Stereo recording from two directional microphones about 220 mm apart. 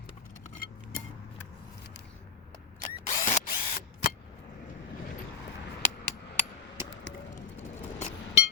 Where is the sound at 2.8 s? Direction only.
30° left (ahead or behind).